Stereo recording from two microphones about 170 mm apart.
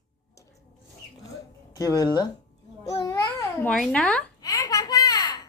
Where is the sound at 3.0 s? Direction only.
15° left (ahead or behind).